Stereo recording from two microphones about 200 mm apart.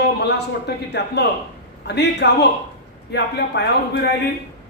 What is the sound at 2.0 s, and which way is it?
A woman's voice, 55° left (ahead or behind).